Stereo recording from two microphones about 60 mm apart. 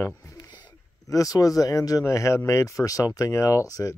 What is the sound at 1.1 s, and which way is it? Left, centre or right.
Speech, left.